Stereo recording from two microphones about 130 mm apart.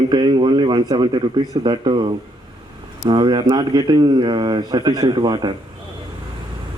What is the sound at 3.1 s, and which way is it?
Speech, 35° right (ahead or behind).